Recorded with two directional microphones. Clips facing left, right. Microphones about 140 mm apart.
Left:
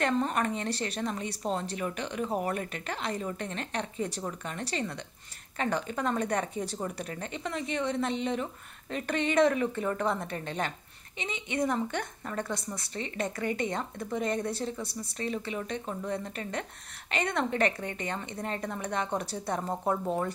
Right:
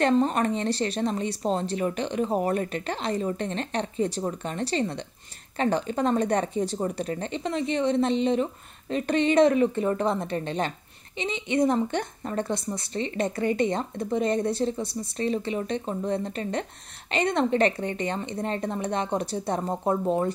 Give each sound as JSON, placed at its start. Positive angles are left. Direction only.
{"t": 0.0, "sound": "a woman's voice", "side_deg": -30}